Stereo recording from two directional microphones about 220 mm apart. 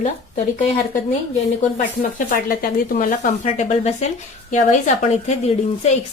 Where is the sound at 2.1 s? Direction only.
40° left (ahead or behind).